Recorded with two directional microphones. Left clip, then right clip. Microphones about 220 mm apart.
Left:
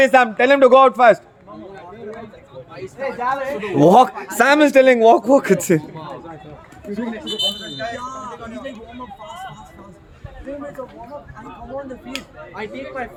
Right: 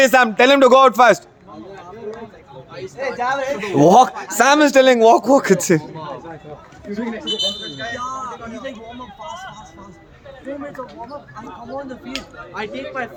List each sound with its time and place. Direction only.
0.0 s a man's voice: 35° right (ahead or behind)
3.2 s speech: 50° right (ahead or behind)
3.8 s speech: centre (ahead or behind)
7.6 s speech: 40° left (ahead or behind)
7.9 s speech: centre (ahead or behind)
8.4 s speech: 25° left (ahead or behind)
12.5 s speech: 15° right (ahead or behind)